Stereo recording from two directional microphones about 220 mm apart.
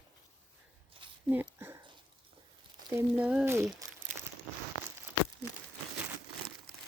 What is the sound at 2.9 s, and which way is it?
Speech, 10° right (ahead or behind).